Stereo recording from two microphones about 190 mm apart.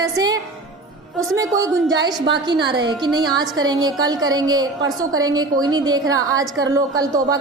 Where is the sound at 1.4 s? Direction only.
15° right (ahead or behind).